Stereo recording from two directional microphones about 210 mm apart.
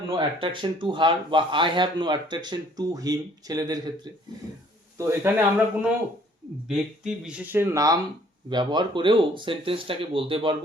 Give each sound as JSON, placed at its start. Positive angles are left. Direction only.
{"t": 0.1, "sound": "speech", "side_deg": -25}